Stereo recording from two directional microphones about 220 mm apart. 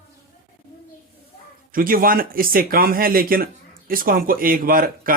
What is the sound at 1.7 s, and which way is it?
Speech, 40° right (ahead or behind).